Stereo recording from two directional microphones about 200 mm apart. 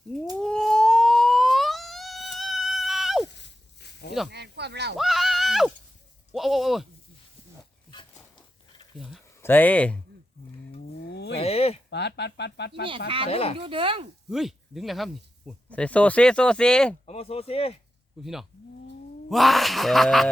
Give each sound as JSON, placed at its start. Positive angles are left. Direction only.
{"t": 0.3, "sound": "a sound", "side_deg": 5}
{"t": 3.3, "sound": "snake", "side_deg": 55}
{"t": 4.3, "sound": "speech", "side_deg": -55}
{"t": 4.9, "sound": "speech", "side_deg": 0}
{"t": 9.0, "sound": "a sound", "side_deg": 0}
{"t": 9.4, "sound": "speech", "side_deg": 10}
{"t": 11.0, "sound": "a sound", "side_deg": 60}
{"t": 11.3, "sound": "a sound", "side_deg": 30}
{"t": 11.9, "sound": "speech", "side_deg": 55}
{"t": 13.3, "sound": "speech", "side_deg": 30}
{"t": 13.6, "sound": "speech", "side_deg": -25}
{"t": 14.3, "sound": "speech", "side_deg": 0}
{"t": 17.1, "sound": "speech", "side_deg": 30}
{"t": 18.2, "sound": "speech", "side_deg": 0}